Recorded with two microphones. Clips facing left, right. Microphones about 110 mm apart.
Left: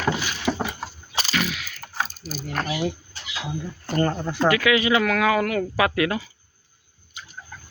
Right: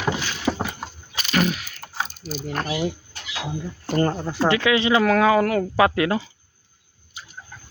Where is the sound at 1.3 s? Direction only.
40° right (ahead or behind).